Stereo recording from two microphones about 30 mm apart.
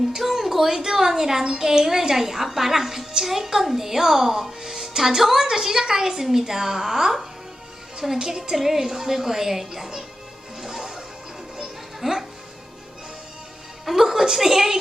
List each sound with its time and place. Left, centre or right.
0.2 s a sound: centre
0.8 s a woman's voice: centre
8.5 s a woman's voice: centre
10.6 s whip: centre
11.9 s speech: centre
13.8 s a woman's voice: centre